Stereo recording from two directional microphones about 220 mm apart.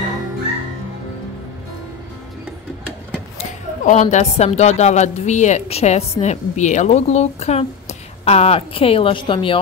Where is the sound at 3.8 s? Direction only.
35° left (ahead or behind).